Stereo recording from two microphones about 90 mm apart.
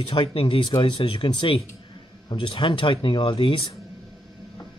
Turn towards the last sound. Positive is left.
turn(degrees=70)  # may be behind; listen again after turning